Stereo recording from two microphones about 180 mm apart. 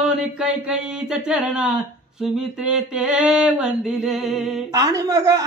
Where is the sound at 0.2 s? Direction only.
5° right (ahead or behind).